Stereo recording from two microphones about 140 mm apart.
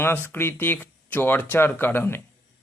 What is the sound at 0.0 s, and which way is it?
Speech, 15° left (ahead or behind).